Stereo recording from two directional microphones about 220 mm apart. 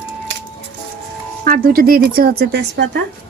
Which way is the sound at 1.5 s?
45° right (ahead or behind).